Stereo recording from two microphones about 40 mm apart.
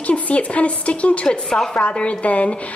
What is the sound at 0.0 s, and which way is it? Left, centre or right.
Speech, left.